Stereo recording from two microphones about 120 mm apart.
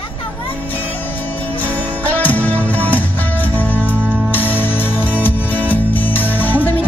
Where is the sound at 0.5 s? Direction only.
15° left (ahead or behind).